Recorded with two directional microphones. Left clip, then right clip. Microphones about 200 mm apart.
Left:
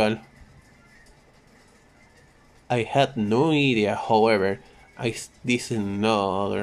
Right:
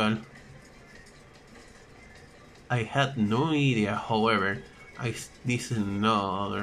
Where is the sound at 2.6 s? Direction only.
20° left (ahead or behind).